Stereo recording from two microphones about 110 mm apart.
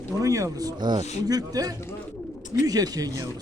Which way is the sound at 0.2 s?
30° right (ahead or behind).